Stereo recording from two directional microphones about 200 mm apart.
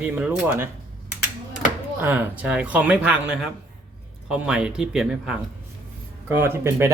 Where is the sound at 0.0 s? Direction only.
10° right (ahead or behind).